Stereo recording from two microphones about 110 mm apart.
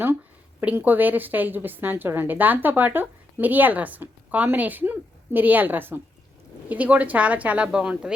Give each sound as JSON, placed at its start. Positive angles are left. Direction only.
{"t": 0.6, "sound": "a woman's voice", "side_deg": -15}